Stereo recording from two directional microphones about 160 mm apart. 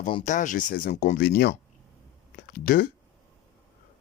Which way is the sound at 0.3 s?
50° left (ahead or behind).